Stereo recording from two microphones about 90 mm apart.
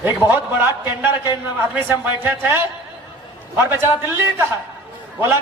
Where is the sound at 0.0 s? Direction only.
25° right (ahead or behind).